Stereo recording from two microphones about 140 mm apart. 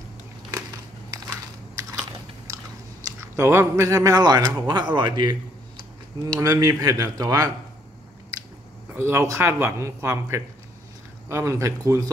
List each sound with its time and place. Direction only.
3.1 s speech: 20° right (ahead or behind)
8.9 s speech: 15° right (ahead or behind)